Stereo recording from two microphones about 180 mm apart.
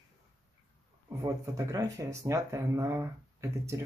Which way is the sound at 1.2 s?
20° right (ahead or behind).